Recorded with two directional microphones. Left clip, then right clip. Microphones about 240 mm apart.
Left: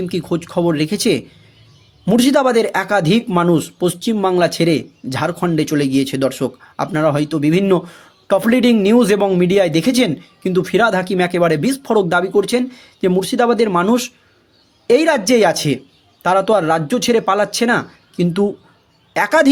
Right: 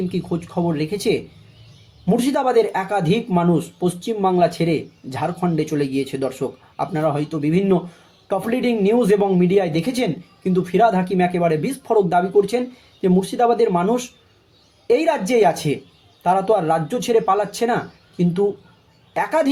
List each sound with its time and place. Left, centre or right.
0.1 s a woman's voice: left